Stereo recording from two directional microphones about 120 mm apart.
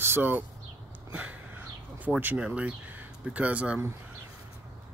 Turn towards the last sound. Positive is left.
turn(degrees=-10)  # may be behind; listen again after turning